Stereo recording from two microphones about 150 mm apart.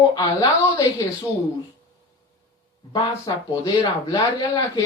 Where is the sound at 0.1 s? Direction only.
25° left (ahead or behind).